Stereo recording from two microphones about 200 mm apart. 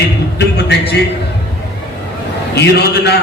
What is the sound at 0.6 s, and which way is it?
Speech, 55° left (ahead or behind).